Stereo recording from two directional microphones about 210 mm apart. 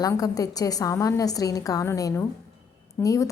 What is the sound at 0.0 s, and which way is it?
A woman's voice, 15° left (ahead or behind).